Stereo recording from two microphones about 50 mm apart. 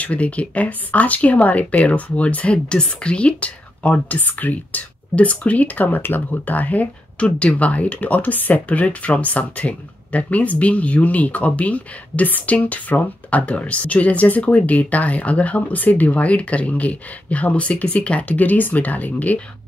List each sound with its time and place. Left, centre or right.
0.0 s speech: left